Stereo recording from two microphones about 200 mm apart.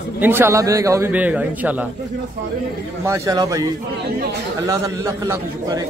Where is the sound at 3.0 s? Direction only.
15° right (ahead or behind).